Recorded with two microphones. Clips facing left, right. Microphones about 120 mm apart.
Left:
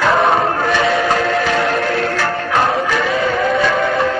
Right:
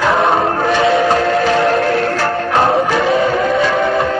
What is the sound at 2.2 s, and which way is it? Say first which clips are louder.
Music: right 2 dB; 30° right (ahead or behind).